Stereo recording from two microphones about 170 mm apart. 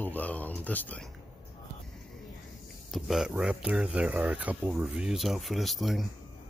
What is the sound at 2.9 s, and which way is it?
Speech, centre (ahead or behind).